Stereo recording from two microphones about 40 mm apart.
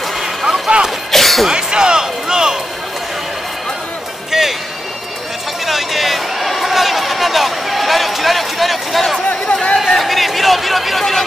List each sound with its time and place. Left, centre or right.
0.5 s a sound: right
1.1 s a sound: centre
1.5 s speech: centre
4.3 s music: centre
5.7 s speech: centre
9.5 s speech: left
9.8 s a man's voice: centre